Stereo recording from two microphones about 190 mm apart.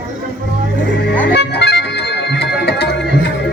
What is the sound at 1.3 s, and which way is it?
Music, 60° left (ahead or behind).